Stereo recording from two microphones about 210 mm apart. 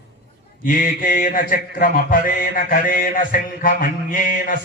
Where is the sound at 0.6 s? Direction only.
40° left (ahead or behind).